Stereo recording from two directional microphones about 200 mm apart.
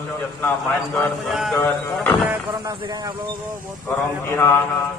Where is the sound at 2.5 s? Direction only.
25° right (ahead or behind).